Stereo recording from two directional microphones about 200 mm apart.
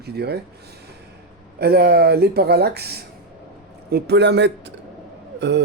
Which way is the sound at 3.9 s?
55° right (ahead or behind).